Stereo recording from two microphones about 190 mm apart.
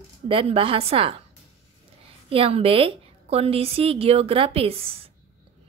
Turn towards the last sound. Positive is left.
turn(degrees=-30)  # may be behind; listen again after turning